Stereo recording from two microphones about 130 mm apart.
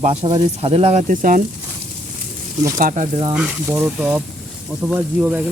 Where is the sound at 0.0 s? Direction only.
50° right (ahead or behind); by 1.4 s 85° right.